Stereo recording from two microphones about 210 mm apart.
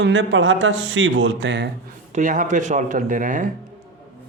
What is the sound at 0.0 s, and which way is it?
Speech, 60° right (ahead or behind).